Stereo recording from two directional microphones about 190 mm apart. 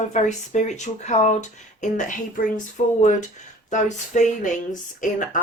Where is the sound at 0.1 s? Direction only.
40° left (ahead or behind).